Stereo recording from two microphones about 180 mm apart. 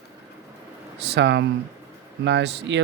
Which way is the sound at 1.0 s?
75° right (ahead or behind).